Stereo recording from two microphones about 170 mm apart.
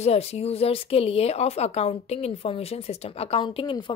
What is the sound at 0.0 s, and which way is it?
Speech, 35° left (ahead or behind).